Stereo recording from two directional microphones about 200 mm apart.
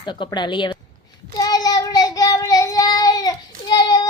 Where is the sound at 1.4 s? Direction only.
20° left (ahead or behind).